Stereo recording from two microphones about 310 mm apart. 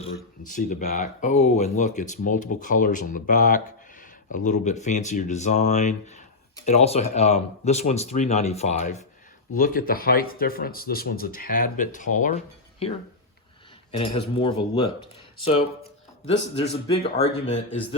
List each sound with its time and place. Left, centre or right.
0.0 s speech: left
13.9 s speech: centre
16.6 s speech: centre